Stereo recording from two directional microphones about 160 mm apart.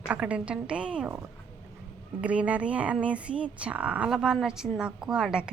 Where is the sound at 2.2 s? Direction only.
10° right (ahead or behind).